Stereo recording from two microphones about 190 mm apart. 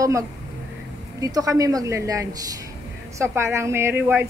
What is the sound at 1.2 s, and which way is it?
A woman's voice, 20° right (ahead or behind).